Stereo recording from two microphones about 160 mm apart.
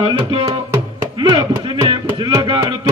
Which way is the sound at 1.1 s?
25° right (ahead or behind).